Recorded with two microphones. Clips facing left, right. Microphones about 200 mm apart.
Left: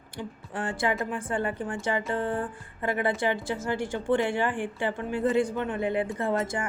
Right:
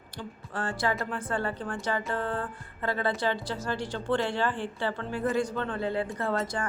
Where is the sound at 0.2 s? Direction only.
15° left (ahead or behind).